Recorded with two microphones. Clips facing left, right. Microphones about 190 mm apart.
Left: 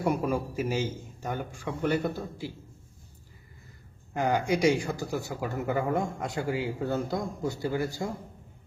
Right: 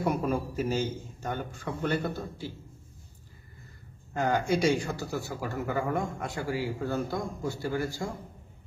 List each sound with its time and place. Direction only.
0.0 s a man's voice: 10° left (ahead or behind)
4.1 s speech: 15° left (ahead or behind)